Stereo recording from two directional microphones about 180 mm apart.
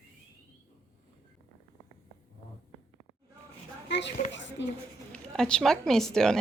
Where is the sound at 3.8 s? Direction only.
75° left (ahead or behind).